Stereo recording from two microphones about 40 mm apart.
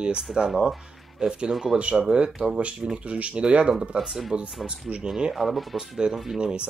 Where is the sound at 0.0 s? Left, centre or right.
Right.